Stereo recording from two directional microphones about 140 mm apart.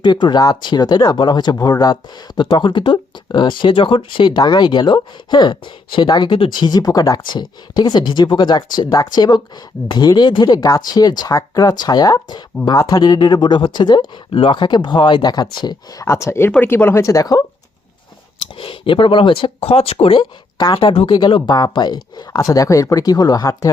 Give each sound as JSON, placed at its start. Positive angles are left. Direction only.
{"t": 0.0, "sound": "speech", "side_deg": 30}
{"t": 18.3, "sound": "speech", "side_deg": 40}